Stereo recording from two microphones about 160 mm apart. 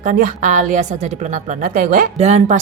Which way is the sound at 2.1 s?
45° right (ahead or behind).